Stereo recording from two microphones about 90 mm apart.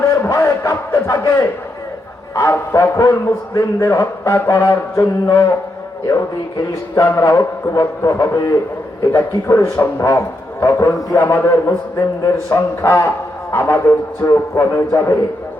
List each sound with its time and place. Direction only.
0.3 s speech: 35° left (ahead or behind)
6.9 s a man's voice: 35° left (ahead or behind)